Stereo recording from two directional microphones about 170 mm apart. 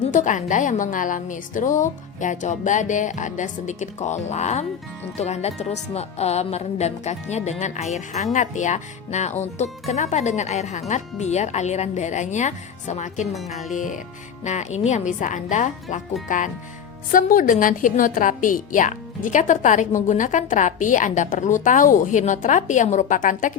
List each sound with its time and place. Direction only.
0.0 s a woman's voice: 50° left (ahead or behind)
13.3 s speech: centre (ahead or behind)
13.7 s a woman's voice: 50° left (ahead or behind)
17.1 s a woman's voice: 55° left (ahead or behind)